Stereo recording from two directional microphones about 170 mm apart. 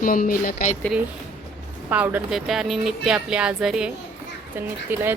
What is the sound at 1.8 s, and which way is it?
A woman's voice, 10° right (ahead or behind).